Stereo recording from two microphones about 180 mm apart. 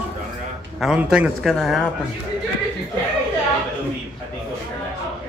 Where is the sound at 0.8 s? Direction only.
5° right (ahead or behind).